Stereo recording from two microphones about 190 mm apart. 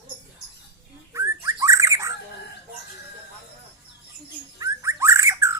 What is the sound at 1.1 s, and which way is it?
Bird, 15° right (ahead or behind).